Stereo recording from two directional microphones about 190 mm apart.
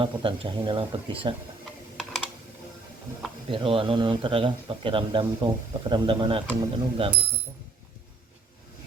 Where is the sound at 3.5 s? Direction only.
30° right (ahead or behind).